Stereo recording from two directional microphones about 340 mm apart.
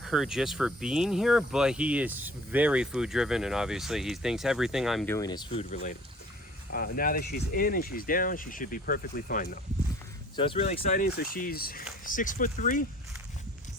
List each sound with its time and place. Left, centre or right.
0.0 s speech: centre; by 12.8 s left